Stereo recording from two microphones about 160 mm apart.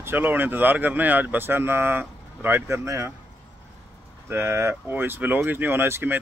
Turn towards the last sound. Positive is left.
turn(degrees=-15)  # may be behind; listen again after turning